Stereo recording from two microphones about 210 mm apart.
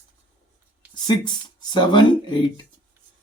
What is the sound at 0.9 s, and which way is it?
Speech, 20° left (ahead or behind).